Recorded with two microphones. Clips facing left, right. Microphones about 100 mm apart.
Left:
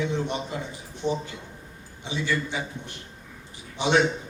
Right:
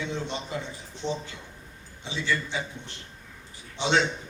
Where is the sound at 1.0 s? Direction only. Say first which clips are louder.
Left 4 dB; 15° left (ahead or behind).